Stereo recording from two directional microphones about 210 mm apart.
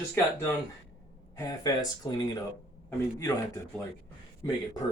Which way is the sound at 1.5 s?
15° left (ahead or behind).